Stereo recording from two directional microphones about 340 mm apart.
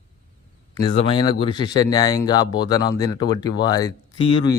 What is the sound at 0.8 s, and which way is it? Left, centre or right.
Speech, centre.